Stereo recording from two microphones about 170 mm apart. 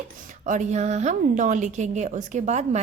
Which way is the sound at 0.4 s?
45° right (ahead or behind).